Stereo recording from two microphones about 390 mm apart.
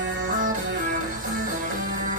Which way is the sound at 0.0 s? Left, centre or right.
Right.